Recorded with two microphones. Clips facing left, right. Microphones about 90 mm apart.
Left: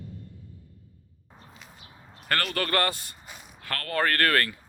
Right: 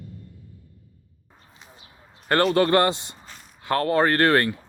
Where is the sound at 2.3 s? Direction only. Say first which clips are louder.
Right 9 dB; 25° right (ahead or behind).